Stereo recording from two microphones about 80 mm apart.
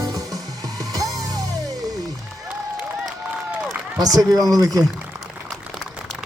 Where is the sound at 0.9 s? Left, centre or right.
Right.